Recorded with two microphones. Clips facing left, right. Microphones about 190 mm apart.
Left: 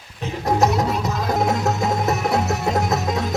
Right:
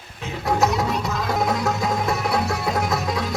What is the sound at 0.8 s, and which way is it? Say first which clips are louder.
Music: left 2 dB; 40° left (ahead or behind).